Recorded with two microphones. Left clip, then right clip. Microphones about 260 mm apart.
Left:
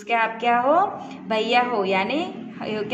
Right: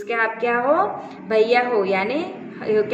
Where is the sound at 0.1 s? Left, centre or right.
Left.